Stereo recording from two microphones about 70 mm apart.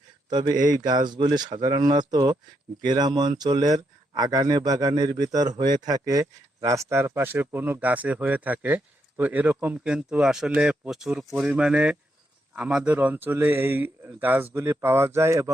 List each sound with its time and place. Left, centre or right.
0.3 s a man's voice: right
2.8 s speech: right
6.1 s speech: right
6.9 s speech: right
9.8 s speech: centre; by 14.5 s right
14.5 s a man's voice: right